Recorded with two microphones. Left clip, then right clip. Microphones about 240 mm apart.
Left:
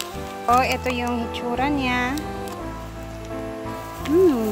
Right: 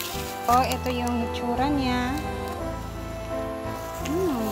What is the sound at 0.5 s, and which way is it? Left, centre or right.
Speech, centre.